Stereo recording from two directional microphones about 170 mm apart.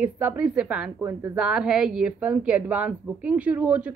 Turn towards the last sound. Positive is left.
turn(degrees=-10)  # may be behind; listen again after turning